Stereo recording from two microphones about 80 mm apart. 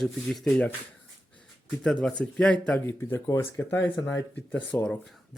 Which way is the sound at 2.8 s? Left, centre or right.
Left.